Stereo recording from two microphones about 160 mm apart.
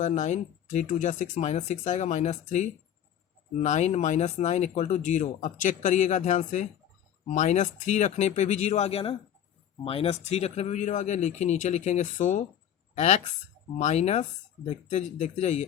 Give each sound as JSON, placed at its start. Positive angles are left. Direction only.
{"t": 0.0, "sound": "speech", "side_deg": 50}
{"t": 3.6, "sound": "a woman's voice", "side_deg": 45}